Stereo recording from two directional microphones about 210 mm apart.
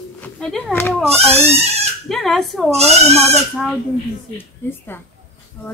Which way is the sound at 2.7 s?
30° right (ahead or behind).